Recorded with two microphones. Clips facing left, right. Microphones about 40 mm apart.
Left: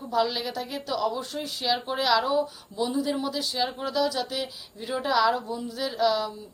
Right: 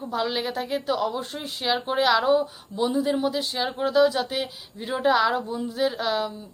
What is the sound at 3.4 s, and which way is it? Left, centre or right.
A woman's voice, right.